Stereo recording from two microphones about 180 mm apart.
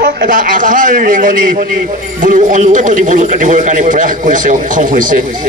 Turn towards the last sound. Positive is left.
turn(degrees=-45)  # may be behind; listen again after turning